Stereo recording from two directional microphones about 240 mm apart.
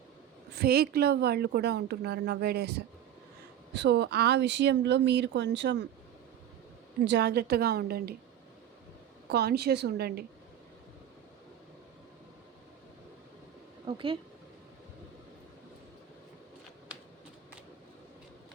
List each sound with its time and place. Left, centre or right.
0.5 s a woman's voice: right
7.0 s a woman's voice: right
9.3 s a woman's voice: right
13.8 s speech: right